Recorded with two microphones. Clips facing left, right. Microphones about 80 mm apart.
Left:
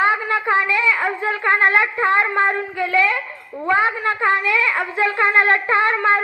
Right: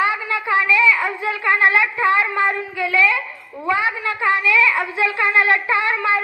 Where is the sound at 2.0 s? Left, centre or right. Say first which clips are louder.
Even; left.